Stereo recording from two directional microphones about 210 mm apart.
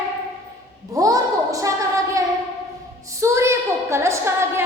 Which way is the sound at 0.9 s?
15° right (ahead or behind).